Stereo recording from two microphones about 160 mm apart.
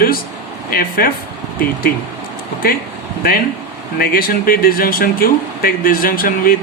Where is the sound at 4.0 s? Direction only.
65° left (ahead or behind).